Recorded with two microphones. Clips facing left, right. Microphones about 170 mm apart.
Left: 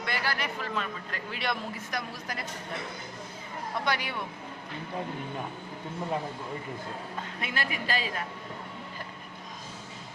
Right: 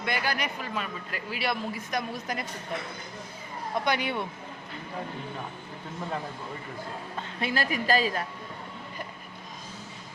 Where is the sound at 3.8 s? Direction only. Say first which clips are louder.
Right 3 dB; 20° right (ahead or behind).